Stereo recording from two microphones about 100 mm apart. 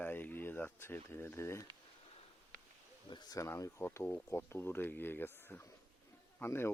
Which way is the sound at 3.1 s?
45° left (ahead or behind).